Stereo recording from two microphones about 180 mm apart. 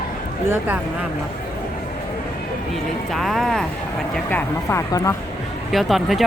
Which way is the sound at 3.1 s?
Centre (ahead or behind).